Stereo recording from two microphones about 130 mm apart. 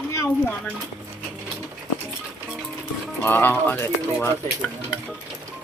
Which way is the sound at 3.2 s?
15° left (ahead or behind).